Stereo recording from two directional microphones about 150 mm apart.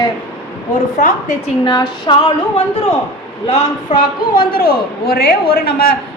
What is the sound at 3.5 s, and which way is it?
A man's voice, 65° left (ahead or behind).